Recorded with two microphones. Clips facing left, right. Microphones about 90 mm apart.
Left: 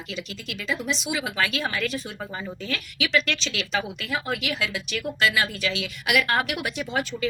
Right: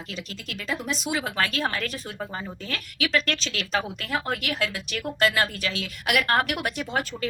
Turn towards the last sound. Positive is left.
turn(degrees=-45)  # may be behind; listen again after turning